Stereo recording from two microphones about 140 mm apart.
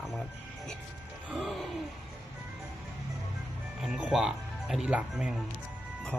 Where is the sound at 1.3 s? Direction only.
Centre (ahead or behind).